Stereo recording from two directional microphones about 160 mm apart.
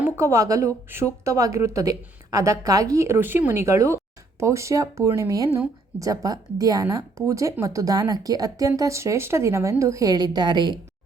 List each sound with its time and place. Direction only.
0.0 s speech: 15° right (ahead or behind)